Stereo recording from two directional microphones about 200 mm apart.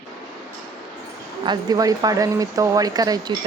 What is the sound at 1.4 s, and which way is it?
Speech, 20° right (ahead or behind).